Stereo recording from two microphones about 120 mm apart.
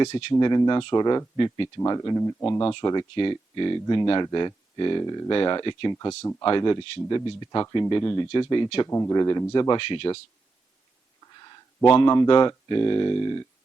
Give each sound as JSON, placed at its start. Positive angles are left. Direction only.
{"t": 0.1, "sound": "speech", "side_deg": 50}
{"t": 0.3, "sound": "speech", "side_deg": 35}
{"t": 1.8, "sound": "speech", "side_deg": 30}
{"t": 2.6, "sound": "speech", "side_deg": 40}
{"t": 8.9, "sound": "speech", "side_deg": 25}
{"t": 9.1, "sound": "speech", "side_deg": 35}
{"t": 11.3, "sound": "a sound", "side_deg": 35}
{"t": 11.9, "sound": "speech", "side_deg": 40}